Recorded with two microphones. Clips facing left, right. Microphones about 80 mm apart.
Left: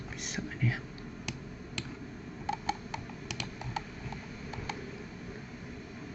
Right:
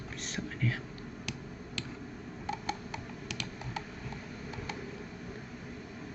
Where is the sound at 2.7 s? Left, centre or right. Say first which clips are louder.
Left 2 dB; left.